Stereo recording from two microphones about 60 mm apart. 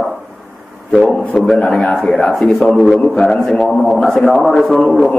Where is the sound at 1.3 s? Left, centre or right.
Centre.